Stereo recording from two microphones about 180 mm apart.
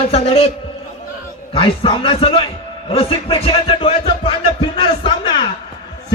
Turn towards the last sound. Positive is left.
turn(degrees=25)  # may be behind; listen again after turning